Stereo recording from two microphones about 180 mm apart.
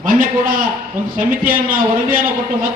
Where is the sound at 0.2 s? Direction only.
50° right (ahead or behind).